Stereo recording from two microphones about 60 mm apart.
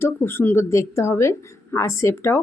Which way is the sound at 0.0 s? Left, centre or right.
Left.